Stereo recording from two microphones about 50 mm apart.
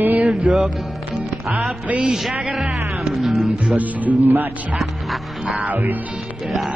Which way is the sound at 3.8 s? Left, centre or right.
Right.